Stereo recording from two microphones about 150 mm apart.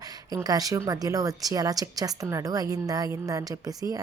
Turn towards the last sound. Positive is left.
turn(degrees=-25)  # may be behind; listen again after turning